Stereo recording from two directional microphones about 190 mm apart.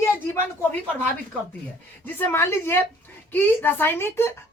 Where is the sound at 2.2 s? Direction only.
10° left (ahead or behind).